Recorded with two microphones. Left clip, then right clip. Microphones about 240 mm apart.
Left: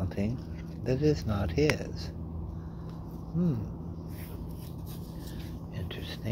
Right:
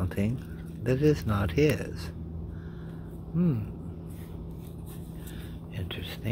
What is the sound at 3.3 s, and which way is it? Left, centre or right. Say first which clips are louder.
Speech: right 3 dB; right.